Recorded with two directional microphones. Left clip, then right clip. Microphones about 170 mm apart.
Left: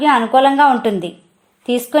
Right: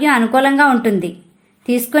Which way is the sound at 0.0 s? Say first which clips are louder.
Left 2 dB; 15° left (ahead or behind).